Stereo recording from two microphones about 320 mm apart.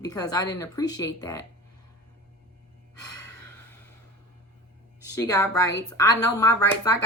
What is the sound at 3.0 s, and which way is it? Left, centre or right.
Gasp, left.